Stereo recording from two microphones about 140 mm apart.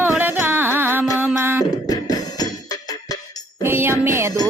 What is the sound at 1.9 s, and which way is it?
Music, 30° left (ahead or behind).